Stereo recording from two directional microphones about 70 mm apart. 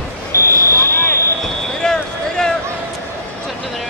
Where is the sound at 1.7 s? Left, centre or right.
Centre.